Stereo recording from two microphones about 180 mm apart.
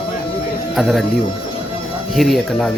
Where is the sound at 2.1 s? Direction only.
Centre (ahead or behind).